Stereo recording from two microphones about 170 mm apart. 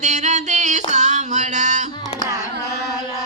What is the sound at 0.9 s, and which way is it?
Music, 45° right (ahead or behind).